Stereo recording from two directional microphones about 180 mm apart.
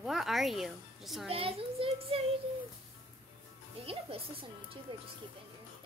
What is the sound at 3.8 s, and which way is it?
Speech, 30° right (ahead or behind).